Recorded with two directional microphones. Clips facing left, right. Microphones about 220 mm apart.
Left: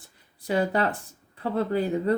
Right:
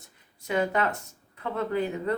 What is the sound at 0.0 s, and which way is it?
Speech, 35° left (ahead or behind).